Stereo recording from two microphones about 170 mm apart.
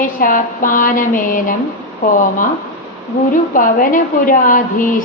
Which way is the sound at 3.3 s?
50° left (ahead or behind).